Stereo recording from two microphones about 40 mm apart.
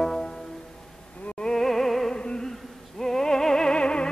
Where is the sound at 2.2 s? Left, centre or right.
Left.